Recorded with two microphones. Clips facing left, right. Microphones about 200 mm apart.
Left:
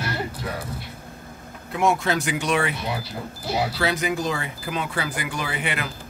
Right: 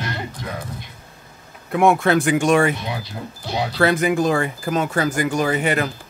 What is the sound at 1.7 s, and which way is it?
Speech, 55° right (ahead or behind).